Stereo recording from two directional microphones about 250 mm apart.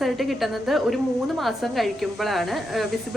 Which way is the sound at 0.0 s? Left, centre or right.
Centre.